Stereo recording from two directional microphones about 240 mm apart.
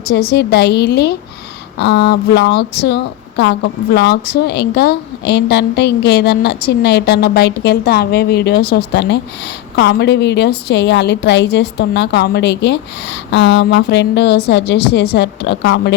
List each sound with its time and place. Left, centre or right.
0.1 s speech: left